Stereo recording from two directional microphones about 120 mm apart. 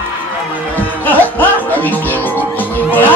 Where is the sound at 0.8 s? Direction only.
15° left (ahead or behind).